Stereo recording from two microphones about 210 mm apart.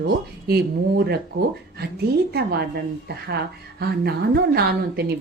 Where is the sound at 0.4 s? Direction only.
50° right (ahead or behind).